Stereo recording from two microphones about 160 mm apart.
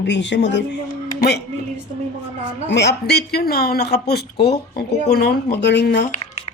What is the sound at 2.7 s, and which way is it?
A woman's voice, 90° left.